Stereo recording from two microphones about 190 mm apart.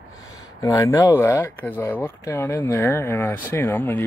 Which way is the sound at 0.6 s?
15° left (ahead or behind).